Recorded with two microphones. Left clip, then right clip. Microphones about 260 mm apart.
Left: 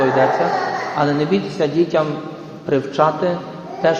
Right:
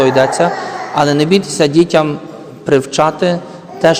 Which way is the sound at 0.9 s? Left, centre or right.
Right.